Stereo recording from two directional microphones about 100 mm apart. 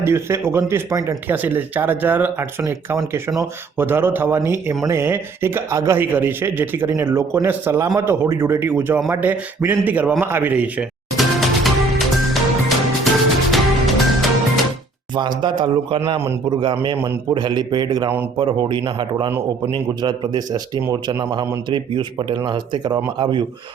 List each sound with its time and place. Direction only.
0.0 s a man's voice: 25° right (ahead or behind)
11.2 s music: centre (ahead or behind)
15.1 s a man's voice: 50° right (ahead or behind)
21.7 s a man's voice: 55° right (ahead or behind)